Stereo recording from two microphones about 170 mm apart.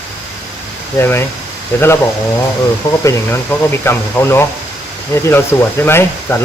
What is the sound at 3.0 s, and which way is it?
Speech, 15° left (ahead or behind).